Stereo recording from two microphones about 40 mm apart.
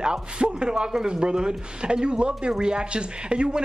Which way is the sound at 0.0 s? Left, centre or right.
Right.